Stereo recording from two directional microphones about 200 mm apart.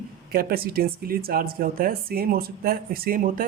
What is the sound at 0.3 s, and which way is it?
Speech, 50° right (ahead or behind).